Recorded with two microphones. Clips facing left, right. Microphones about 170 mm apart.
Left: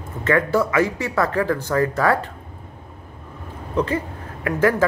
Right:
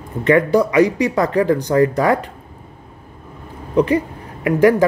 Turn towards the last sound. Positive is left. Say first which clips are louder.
# right 6 dB
turn(degrees=-15)  # may be behind; listen again after turning